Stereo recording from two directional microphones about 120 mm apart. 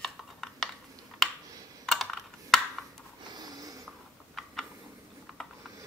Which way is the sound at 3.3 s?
30° right (ahead or behind).